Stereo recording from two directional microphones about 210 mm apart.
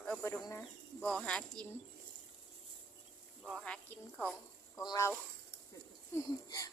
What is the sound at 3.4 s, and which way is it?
Speech, 5° left (ahead or behind).